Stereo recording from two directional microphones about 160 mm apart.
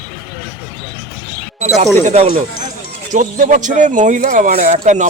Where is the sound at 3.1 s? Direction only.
55° right (ahead or behind).